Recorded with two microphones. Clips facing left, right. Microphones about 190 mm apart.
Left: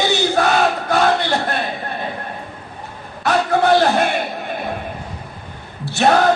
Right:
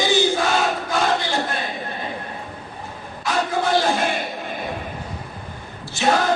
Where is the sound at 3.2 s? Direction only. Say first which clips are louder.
Left 6 dB; 65° left (ahead or behind).